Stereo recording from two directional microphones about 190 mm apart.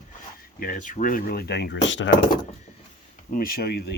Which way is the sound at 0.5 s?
45° left (ahead or behind).